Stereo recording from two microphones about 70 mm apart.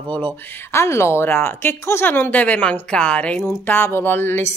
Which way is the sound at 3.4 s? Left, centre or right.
Left.